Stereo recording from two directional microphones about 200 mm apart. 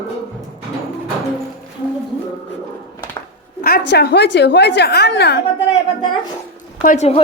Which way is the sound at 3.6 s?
50° left (ahead or behind).